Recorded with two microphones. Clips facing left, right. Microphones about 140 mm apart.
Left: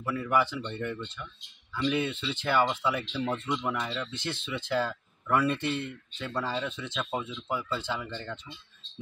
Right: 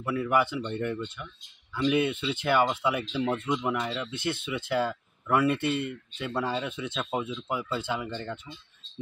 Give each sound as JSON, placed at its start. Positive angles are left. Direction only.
{"t": 0.0, "sound": "speech", "side_deg": -5}